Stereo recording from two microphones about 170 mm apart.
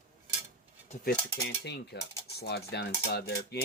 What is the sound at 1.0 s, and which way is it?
Speech, 65° left (ahead or behind).